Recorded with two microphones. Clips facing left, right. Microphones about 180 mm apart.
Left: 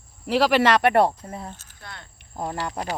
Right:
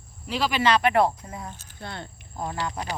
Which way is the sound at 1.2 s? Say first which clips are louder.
Left 2 dB; 30° left (ahead or behind).